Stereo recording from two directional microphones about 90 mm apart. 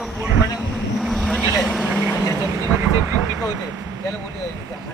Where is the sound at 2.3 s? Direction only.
40° right (ahead or behind).